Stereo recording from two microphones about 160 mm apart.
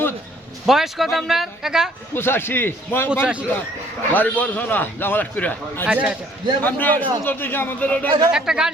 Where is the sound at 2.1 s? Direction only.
15° left (ahead or behind).